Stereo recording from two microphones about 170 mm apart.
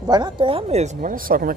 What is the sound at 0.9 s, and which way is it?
Speech, 55° right (ahead or behind).